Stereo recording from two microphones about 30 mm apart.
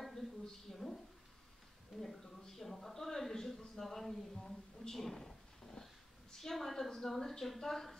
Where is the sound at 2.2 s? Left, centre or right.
Centre.